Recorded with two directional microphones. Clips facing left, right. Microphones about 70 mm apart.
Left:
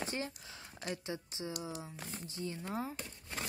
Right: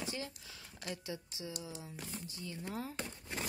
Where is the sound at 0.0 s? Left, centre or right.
Left.